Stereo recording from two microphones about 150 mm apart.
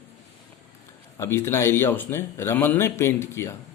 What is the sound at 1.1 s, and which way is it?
A man's voice, 15° left (ahead or behind).